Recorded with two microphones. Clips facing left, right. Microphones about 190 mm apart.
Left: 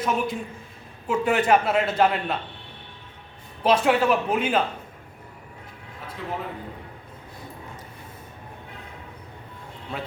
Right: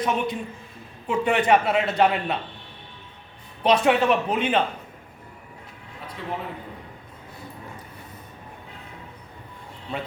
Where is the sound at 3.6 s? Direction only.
5° left (ahead or behind).